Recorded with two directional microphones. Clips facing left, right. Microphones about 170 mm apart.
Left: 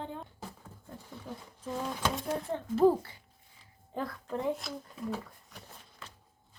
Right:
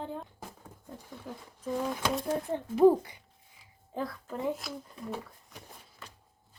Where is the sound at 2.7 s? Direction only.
15° right (ahead or behind).